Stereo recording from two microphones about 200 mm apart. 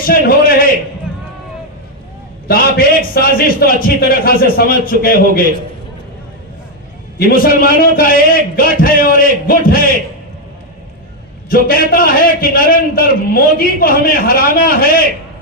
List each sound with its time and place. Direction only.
0.0 s a man's voice: 45° left (ahead or behind)
2.5 s a man's voice: 45° left (ahead or behind)
7.2 s a man's voice: 45° left (ahead or behind)
11.4 s a man's voice: 45° left (ahead or behind)